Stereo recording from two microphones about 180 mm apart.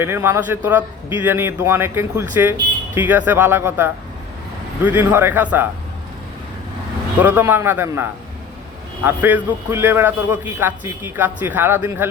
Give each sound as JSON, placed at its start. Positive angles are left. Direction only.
{"t": 0.0, "sound": "a man's voice", "side_deg": -15}
{"t": 7.2, "sound": "a man's voice", "side_deg": -10}
{"t": 9.0, "sound": "a man's voice", "side_deg": -10}